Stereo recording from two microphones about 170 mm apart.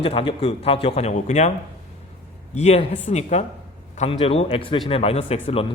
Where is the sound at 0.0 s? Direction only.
35° left (ahead or behind).